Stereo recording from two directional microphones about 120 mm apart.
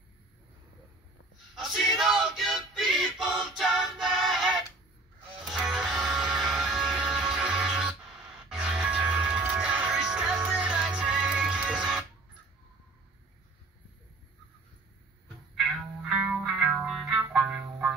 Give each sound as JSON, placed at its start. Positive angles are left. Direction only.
{"t": 1.5, "sound": "male singing", "side_deg": 0}
{"t": 5.4, "sound": "music", "side_deg": 0}
{"t": 16.4, "sound": "music", "side_deg": 0}